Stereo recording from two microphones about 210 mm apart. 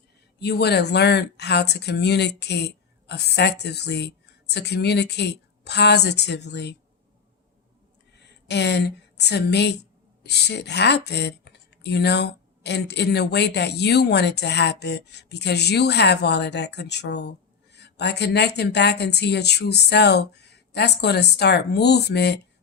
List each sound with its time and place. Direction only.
0.3 s speech: 50° left (ahead or behind)
8.4 s speech: 55° left (ahead or behind)